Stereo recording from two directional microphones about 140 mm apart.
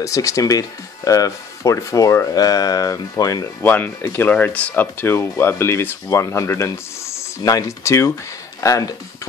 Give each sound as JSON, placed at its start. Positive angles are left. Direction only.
{"t": 0.0, "sound": "speech", "side_deg": 20}
{"t": 3.6, "sound": "speech", "side_deg": 10}